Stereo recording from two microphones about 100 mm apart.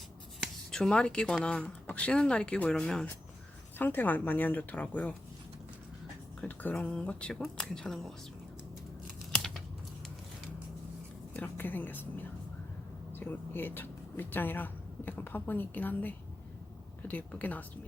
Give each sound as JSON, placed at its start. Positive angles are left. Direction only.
{"t": 0.3, "sound": "speech", "side_deg": 5}
{"t": 3.8, "sound": "speech", "side_deg": 20}
{"t": 6.4, "sound": "speech", "side_deg": 15}
{"t": 9.3, "sound": "computer keyboard", "side_deg": 5}
{"t": 11.4, "sound": "speech", "side_deg": 20}